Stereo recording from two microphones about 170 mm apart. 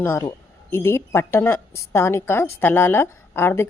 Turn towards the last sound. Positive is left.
turn(degrees=15)  # may be behind; listen again after turning